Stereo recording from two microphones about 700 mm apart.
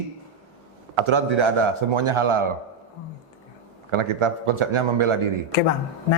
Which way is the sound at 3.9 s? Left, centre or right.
Right.